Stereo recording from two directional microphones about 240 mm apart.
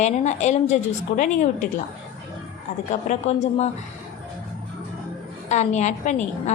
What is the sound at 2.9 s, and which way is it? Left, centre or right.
Speech, left.